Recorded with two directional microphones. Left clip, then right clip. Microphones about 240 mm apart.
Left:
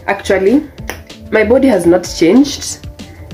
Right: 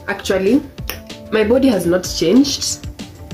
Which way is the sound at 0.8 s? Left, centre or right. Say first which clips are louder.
Left 3 dB; centre.